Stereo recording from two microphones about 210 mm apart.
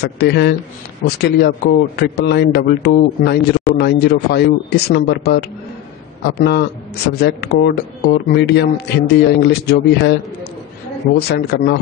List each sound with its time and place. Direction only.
0.0 s a man's voice: 50° left (ahead or behind)
11.1 s a man's voice: 55° left (ahead or behind)